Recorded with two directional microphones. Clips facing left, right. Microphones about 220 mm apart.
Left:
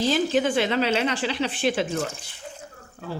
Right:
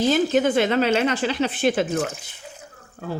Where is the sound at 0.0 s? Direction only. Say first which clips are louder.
Right 3 dB; 50° right (ahead or behind).